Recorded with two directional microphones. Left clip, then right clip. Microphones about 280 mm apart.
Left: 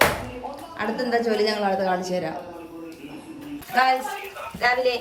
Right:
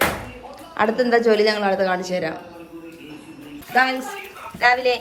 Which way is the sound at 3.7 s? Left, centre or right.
Centre.